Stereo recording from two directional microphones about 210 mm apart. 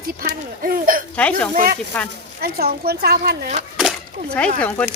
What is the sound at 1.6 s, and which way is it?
Speech, 40° right (ahead or behind).